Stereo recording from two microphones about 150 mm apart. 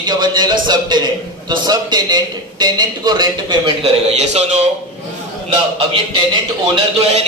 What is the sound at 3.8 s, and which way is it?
Speech, 45° right (ahead or behind).